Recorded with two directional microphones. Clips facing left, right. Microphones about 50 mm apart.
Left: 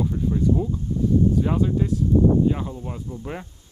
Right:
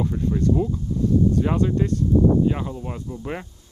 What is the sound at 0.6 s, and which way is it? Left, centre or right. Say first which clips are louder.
Speech: right 3 dB; right.